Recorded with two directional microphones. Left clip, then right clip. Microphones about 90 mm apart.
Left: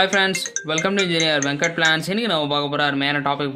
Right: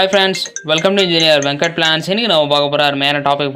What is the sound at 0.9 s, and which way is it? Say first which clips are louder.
Speech: right 7 dB; 35° right (ahead or behind).